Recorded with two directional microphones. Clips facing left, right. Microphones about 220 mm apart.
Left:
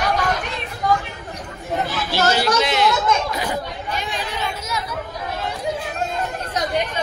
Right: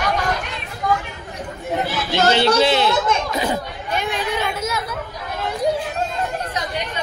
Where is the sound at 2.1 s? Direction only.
25° right (ahead or behind).